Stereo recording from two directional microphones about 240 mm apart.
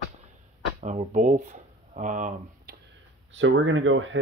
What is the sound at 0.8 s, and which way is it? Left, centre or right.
Speech, right.